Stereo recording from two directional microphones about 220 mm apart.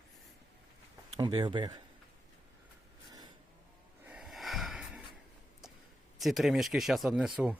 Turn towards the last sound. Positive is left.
turn(degrees=0)  # may be behind; listen again after turning